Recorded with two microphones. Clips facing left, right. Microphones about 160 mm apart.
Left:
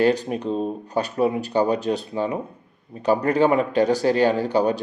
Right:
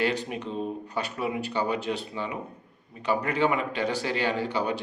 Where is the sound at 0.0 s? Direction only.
40° left (ahead or behind).